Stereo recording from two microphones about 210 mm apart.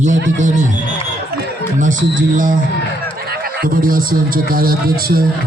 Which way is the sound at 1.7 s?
40° right (ahead or behind).